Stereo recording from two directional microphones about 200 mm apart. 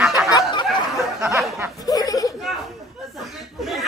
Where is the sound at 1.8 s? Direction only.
20° left (ahead or behind).